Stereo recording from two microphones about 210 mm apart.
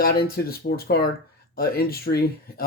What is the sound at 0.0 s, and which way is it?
Speech, 45° left (ahead or behind).